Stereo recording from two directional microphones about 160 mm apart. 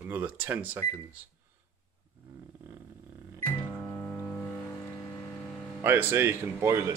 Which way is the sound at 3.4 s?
20° left (ahead or behind).